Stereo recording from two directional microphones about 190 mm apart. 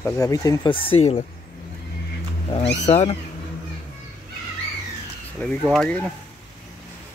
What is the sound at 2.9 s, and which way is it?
Speech, 30° left (ahead or behind).